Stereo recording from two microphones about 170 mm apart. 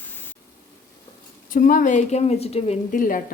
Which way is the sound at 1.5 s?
50° left (ahead or behind).